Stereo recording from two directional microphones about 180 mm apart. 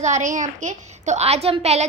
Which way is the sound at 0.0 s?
40° right (ahead or behind).